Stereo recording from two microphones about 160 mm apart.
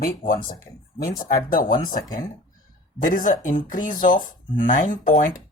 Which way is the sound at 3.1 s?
55° left (ahead or behind).